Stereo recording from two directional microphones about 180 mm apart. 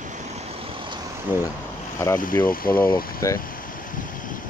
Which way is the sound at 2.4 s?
55° left (ahead or behind).